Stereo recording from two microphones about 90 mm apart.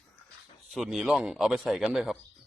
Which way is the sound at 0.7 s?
Centre (ahead or behind).